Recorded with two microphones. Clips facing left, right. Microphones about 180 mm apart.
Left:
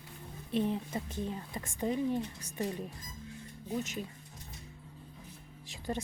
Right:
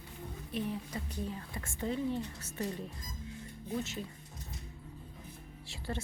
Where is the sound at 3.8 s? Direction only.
15° left (ahead or behind).